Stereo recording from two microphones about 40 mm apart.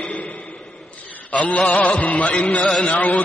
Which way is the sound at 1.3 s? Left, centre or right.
Left.